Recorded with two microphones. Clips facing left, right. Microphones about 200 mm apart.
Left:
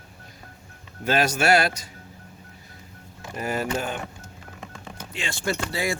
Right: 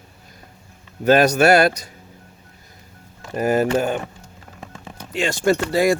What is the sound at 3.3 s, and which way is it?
Speech, 40° right (ahead or behind).